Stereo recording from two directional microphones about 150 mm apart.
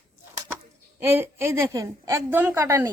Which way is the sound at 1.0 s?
15° right (ahead or behind).